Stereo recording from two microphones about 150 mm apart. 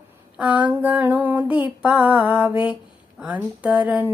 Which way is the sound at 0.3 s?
10° right (ahead or behind).